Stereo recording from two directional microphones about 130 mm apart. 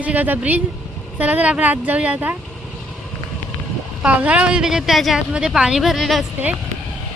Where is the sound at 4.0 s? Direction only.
10° right (ahead or behind).